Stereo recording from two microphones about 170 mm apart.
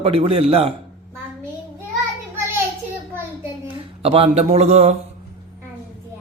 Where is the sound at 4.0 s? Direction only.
35° right (ahead or behind).